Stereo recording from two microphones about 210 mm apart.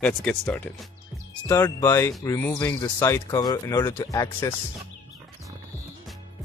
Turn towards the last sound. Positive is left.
turn(degrees=15)  # may be behind; listen again after turning